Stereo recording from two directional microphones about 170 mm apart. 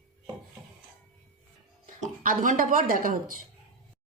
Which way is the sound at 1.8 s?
50° right (ahead or behind).